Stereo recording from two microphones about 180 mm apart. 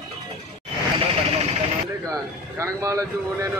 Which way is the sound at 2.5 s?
15° right (ahead or behind).